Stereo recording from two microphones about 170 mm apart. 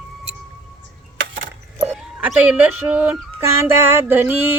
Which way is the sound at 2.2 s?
10° right (ahead or behind).